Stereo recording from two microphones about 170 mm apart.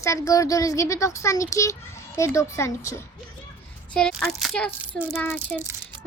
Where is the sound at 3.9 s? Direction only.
5° left (ahead or behind).